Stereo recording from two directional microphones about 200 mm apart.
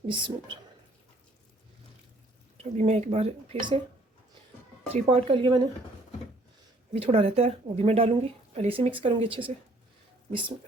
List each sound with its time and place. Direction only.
0.1 s speech: 25° right (ahead or behind)
2.7 s speech: 35° right (ahead or behind)
4.9 s speech: 30° right (ahead or behind)
6.9 s speech: 30° right (ahead or behind)